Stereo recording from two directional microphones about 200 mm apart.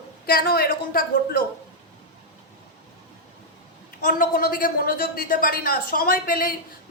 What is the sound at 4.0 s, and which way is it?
Speech, 45° left (ahead or behind).